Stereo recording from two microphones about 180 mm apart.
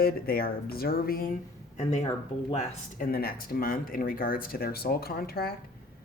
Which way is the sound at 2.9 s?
55° left (ahead or behind).